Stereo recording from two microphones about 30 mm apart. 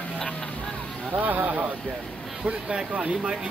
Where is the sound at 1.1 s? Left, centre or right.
Right.